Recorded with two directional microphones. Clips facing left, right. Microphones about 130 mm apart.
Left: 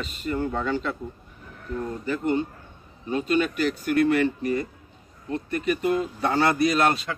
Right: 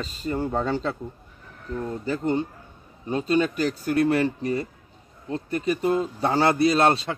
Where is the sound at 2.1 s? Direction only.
30° right (ahead or behind).